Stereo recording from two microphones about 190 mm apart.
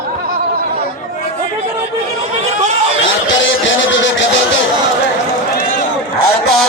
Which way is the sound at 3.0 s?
80° left.